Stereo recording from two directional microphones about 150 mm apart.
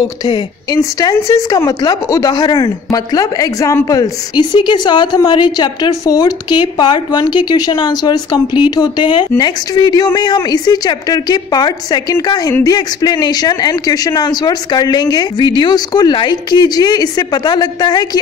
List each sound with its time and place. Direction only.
0.0 s a woman's voice: 25° left (ahead or behind)